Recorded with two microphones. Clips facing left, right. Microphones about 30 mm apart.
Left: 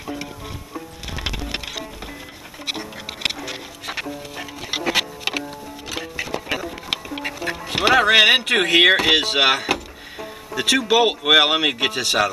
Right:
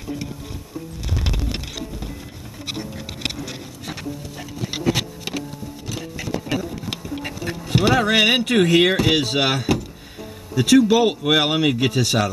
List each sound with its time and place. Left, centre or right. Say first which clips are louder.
0.0 s music: even; left
2.6 s music: left 2 dB; left
10.5 s speech: right 3 dB; left